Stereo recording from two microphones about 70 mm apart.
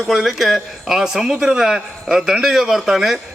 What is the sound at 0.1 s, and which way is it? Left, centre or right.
A man's voice, centre.